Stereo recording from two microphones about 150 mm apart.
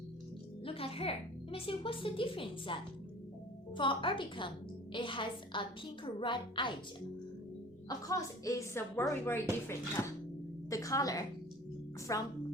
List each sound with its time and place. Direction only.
0.6 s a child's voice: 40° left (ahead or behind)
3.8 s a child's voice: 35° left (ahead or behind)
7.9 s a woman's voice: 20° left (ahead or behind)